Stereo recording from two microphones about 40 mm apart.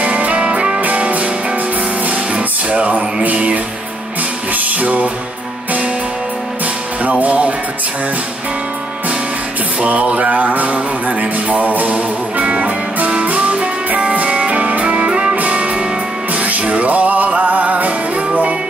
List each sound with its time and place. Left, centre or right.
0.0 s music: right
7.0 s music: right
9.8 s music: right